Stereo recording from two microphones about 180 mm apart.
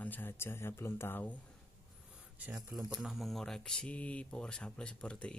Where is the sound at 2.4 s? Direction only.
10° right (ahead or behind).